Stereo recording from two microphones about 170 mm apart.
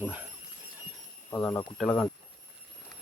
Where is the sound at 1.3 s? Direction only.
15° left (ahead or behind).